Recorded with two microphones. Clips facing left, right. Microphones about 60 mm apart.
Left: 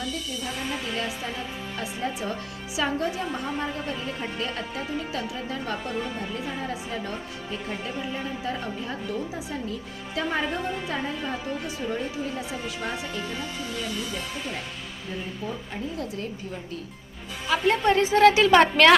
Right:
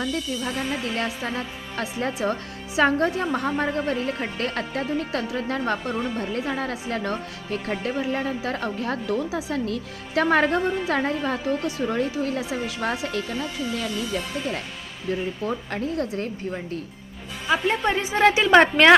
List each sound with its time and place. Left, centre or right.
0.9 s speech: right
2.7 s a woman's voice: right
15.4 s speech: right
17.5 s a woman's voice: centre